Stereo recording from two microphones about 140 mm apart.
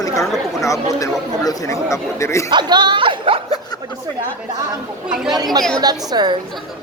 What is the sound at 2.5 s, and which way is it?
Speech, 30° right (ahead or behind).